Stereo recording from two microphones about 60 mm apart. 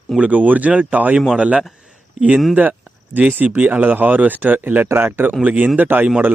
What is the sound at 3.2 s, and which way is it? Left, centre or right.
Speech, right.